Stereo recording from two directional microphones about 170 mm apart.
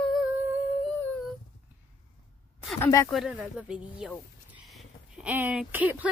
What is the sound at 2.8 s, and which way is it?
Speech, 15° left (ahead or behind).